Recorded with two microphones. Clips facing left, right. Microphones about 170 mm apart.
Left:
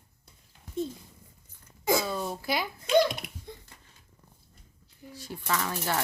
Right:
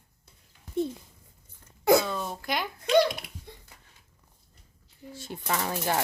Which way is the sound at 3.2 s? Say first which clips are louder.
Left 3 dB; 20° left (ahead or behind).